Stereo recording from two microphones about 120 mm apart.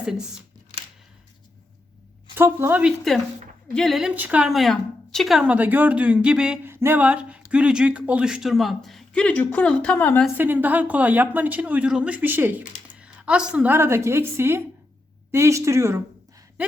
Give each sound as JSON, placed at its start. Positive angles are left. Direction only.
{"t": 2.3, "sound": "speech", "side_deg": -20}
{"t": 3.8, "sound": "a woman's voice", "side_deg": 0}
{"t": 4.1, "sound": "speech", "side_deg": -10}
{"t": 6.7, "sound": "speech", "side_deg": -20}
{"t": 10.3, "sound": "speech", "side_deg": -15}
{"t": 13.0, "sound": "a sound", "side_deg": -10}
{"t": 13.7, "sound": "a woman's voice", "side_deg": -20}